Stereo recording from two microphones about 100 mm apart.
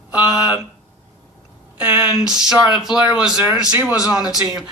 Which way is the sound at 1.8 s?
15° right (ahead or behind).